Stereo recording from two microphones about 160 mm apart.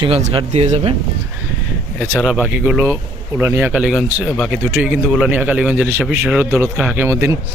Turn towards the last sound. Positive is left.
turn(degrees=-15)  # may be behind; listen again after turning